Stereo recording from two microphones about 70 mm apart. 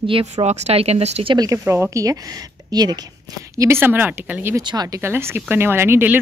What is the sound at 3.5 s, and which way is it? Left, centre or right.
Speech, right.